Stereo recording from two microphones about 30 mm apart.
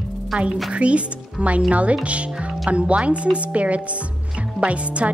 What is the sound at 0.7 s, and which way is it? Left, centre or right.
A woman's voice, right.